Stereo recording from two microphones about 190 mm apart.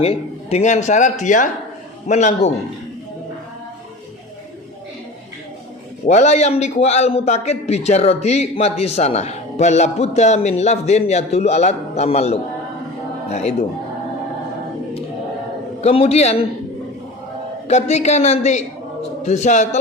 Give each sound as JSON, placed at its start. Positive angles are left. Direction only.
{"t": 0.0, "sound": "a man's voice", "side_deg": 30}
{"t": 6.1, "sound": "a man's voice", "side_deg": 35}
{"t": 15.8, "sound": "a man's voice", "side_deg": 35}
{"t": 17.7, "sound": "a man's voice", "side_deg": 35}